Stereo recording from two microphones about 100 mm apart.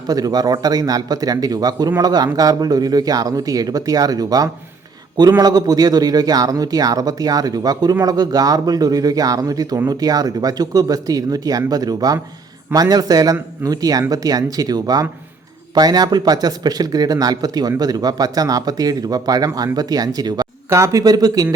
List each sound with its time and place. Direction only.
0.1 s speech: 40° right (ahead or behind)
20.7 s speech: 30° right (ahead or behind)